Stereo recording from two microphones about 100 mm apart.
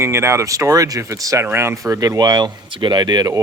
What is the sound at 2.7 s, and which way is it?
Speech, 55° right (ahead or behind).